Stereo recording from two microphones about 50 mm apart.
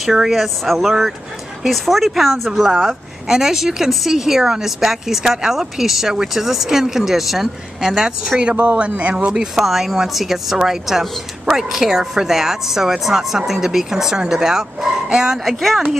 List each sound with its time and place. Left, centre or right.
0.0 s a woman's voice: centre
8.5 s speech: right
9.6 s a woman's voice: centre